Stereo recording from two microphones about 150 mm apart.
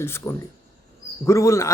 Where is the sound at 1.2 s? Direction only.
20° left (ahead or behind).